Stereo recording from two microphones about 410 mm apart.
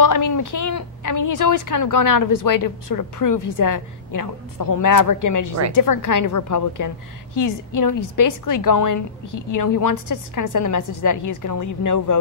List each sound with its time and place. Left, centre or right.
0.0 s a woman's voice: left